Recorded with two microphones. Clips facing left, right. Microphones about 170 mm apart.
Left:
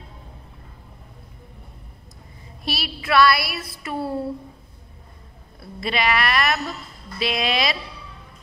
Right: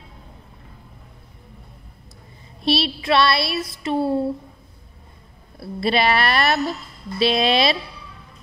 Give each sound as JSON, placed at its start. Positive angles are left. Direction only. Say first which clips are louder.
{"t": 2.6, "sound": "child singing", "louder": "right 9 dB", "side_deg": -25}
{"t": 5.6, "sound": "speech", "louder": "right 5 dB", "side_deg": -30}
{"t": 7.2, "sound": "child singing", "louder": "right 5 dB", "side_deg": -30}